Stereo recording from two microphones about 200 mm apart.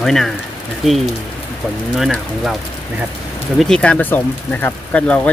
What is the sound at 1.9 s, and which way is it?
Speech, centre (ahead or behind).